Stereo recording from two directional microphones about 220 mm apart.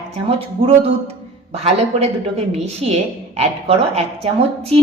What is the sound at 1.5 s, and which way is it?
A woman's voice, 30° right (ahead or behind).